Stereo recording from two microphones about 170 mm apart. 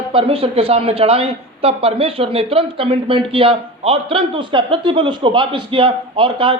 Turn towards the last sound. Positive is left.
turn(degrees=-30)  # may be behind; listen again after turning